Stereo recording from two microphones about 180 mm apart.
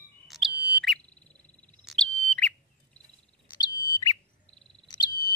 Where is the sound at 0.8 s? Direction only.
5° left (ahead or behind).